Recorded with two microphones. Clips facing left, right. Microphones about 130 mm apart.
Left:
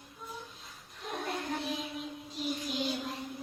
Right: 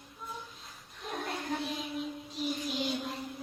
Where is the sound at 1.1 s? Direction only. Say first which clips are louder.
Even; centre (ahead or behind).